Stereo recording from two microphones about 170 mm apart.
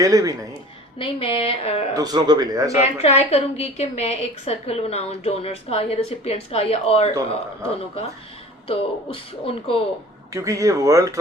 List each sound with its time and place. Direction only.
0.0 s speech: 20° right (ahead or behind)
0.9 s a woman's voice: 30° left (ahead or behind)
1.9 s speech: 20° right (ahead or behind)
2.7 s a woman's voice: 40° left (ahead or behind)
8.6 s a woman's voice: 35° left (ahead or behind)
10.3 s speech: 20° right (ahead or behind)